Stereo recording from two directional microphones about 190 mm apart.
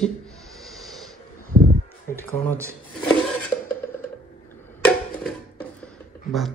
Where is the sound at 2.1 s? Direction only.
10° left (ahead or behind).